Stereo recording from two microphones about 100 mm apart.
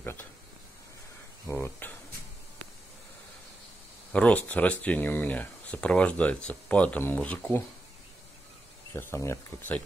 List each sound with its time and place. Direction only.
0.0 s speech: 20° left (ahead or behind)
1.5 s speech: 20° left (ahead or behind)
4.1 s speech: 15° left (ahead or behind)
8.9 s speech: 25° left (ahead or behind)